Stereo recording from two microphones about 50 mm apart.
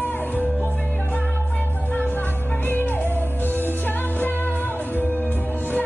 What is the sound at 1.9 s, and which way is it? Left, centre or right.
Music, left.